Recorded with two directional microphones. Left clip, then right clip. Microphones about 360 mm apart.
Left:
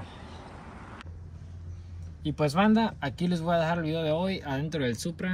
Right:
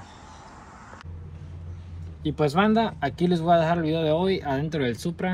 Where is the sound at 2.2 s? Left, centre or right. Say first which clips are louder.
Right 3 dB; centre.